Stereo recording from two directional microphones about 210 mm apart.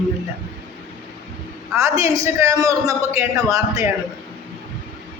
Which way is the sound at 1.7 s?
15° right (ahead or behind).